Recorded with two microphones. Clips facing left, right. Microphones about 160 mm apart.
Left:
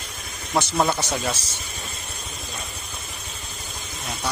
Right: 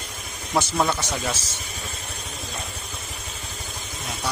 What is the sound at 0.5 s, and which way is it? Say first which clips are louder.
Speech: left 1 dB; 10° left (ahead or behind).